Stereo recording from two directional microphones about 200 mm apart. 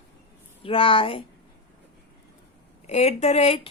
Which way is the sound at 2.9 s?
35° left (ahead or behind).